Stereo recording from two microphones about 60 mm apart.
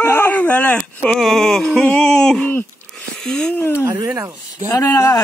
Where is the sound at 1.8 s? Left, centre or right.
Centre.